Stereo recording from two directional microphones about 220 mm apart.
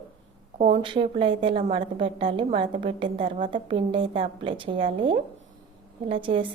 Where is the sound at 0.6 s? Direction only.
20° right (ahead or behind).